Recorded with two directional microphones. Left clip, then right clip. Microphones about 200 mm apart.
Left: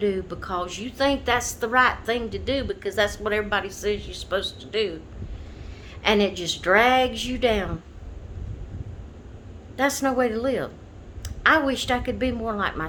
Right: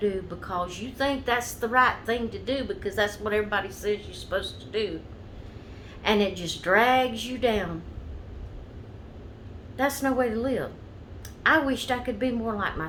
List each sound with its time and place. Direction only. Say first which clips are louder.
0.0 s a woman's voice: left 3 dB; 45° left (ahead or behind)
6.0 s a woman's voice: left 3 dB; 50° left (ahead or behind)
9.7 s a woman's voice: left 3 dB; 50° left (ahead or behind)